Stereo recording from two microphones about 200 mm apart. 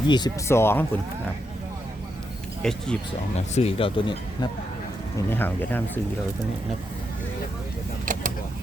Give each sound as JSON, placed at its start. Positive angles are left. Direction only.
{"t": 0.1, "sound": "speech", "side_deg": 15}
{"t": 2.6, "sound": "speech", "side_deg": 5}
{"t": 3.3, "sound": "speech", "side_deg": 30}
{"t": 5.1, "sound": "speech", "side_deg": 10}
{"t": 8.0, "sound": "vehicle", "side_deg": -40}